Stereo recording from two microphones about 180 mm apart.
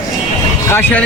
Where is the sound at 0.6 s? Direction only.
10° left (ahead or behind).